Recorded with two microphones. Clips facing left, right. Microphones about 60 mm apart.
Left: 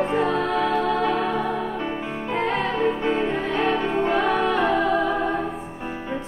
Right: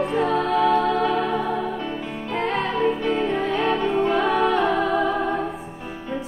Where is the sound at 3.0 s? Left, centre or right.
Centre.